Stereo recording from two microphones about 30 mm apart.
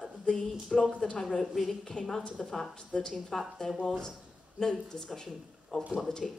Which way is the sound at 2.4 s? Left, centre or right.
Centre.